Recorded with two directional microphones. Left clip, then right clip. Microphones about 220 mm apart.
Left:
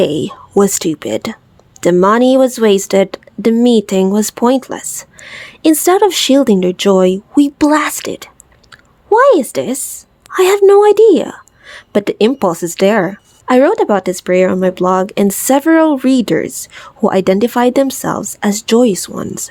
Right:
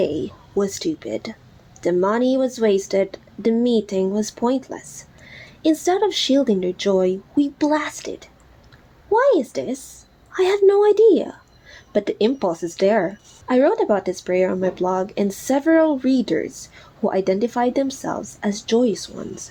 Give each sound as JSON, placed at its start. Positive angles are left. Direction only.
{"t": 0.0, "sound": "a woman's voice", "side_deg": 45}